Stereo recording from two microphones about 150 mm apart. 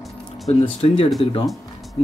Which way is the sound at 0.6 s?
40° left (ahead or behind).